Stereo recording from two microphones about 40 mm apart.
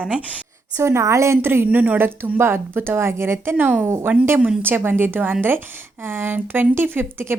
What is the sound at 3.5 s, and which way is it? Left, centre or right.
Speech, right.